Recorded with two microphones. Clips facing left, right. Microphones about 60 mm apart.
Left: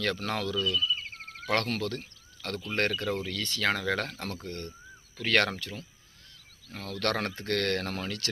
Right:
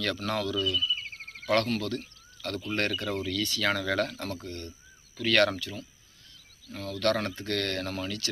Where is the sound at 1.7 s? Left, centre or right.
Left.